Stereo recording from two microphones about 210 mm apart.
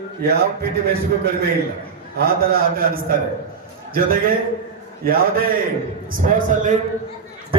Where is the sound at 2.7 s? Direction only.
45° right (ahead or behind).